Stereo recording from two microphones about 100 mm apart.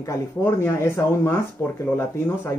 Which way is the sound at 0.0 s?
25° left (ahead or behind).